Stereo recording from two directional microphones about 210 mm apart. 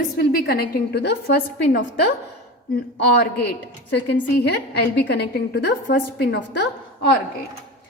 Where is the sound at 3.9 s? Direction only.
55° left (ahead or behind).